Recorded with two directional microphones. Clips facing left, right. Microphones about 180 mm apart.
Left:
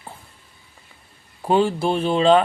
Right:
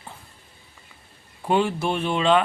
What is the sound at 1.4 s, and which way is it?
A man's voice, 35° left (ahead or behind).